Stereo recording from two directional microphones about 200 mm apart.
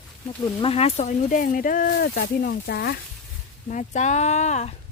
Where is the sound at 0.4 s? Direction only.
30° left (ahead or behind); by 3.0 s 50° left (ahead or behind).